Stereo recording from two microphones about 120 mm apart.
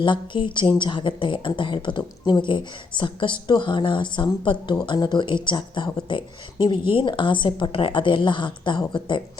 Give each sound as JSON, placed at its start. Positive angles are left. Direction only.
{"t": 0.0, "sound": "speech", "side_deg": 40}